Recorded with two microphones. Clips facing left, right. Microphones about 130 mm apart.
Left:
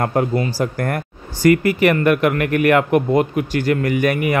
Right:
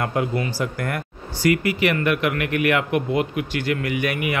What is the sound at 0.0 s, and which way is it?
Speech, 40° left (ahead or behind).